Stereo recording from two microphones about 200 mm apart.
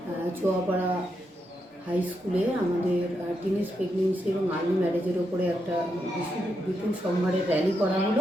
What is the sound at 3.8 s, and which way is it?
Speech, 35° right (ahead or behind).